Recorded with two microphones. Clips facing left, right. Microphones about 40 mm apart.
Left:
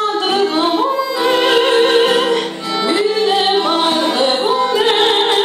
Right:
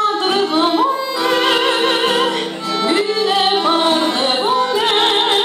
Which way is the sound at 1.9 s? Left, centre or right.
Left.